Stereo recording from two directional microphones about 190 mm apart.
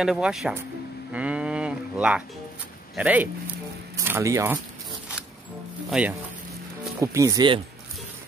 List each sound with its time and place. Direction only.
0.0 s speech: centre (ahead or behind)
5.9 s speech: 5° right (ahead or behind)
7.0 s speech: 15° right (ahead or behind)